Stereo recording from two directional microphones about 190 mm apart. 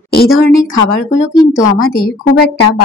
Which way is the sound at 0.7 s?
90° left.